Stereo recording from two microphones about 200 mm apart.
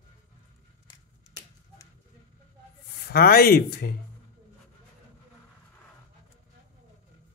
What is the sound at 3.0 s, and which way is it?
Speech, 50° left (ahead or behind).